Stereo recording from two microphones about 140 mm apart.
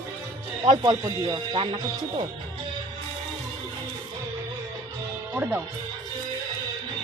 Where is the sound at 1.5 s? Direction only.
40° right (ahead or behind).